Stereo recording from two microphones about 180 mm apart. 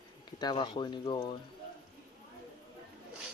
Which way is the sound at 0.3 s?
25° left (ahead or behind).